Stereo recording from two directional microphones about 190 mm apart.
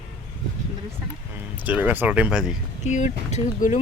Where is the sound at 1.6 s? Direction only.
10° right (ahead or behind).